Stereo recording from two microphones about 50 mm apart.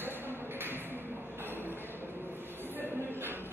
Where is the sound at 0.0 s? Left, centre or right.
Right.